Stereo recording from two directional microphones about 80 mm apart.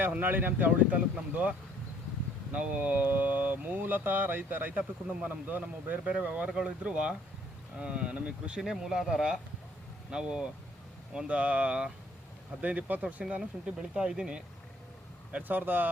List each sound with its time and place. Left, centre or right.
0.1 s speech: right